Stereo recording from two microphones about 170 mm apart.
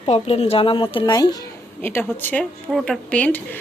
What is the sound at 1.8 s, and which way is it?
Speech, 10° left (ahead or behind).